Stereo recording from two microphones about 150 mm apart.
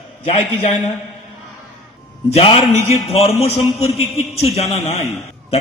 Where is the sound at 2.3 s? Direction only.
40° left (ahead or behind).